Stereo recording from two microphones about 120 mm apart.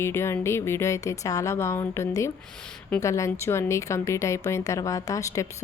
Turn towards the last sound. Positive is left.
turn(degrees=25)  # may be behind; listen again after turning